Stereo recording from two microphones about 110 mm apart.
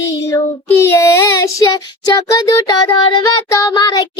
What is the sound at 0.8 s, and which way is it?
Speech, 25° left (ahead or behind).